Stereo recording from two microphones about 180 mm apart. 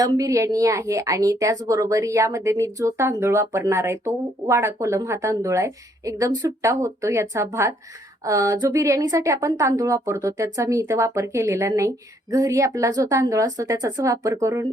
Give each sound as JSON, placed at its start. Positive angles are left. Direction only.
{"t": 0.0, "sound": "a woman's voice", "side_deg": -20}